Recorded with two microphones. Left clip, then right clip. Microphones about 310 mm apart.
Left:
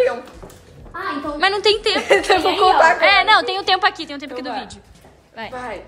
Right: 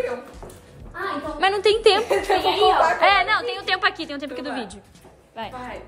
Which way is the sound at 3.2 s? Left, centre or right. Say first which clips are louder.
Left 7 dB; centre.